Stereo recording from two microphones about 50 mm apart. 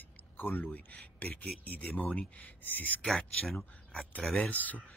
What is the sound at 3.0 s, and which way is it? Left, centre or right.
Speech, centre.